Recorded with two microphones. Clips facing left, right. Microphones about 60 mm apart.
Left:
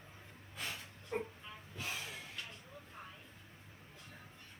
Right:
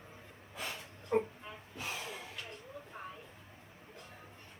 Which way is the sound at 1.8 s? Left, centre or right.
Centre.